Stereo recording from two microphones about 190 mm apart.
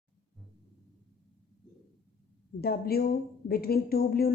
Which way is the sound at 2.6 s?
55° left (ahead or behind).